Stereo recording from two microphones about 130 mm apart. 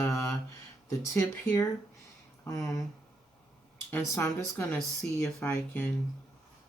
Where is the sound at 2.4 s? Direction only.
20° left (ahead or behind).